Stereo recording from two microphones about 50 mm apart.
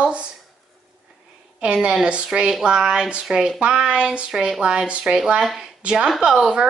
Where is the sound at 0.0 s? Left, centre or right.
Right.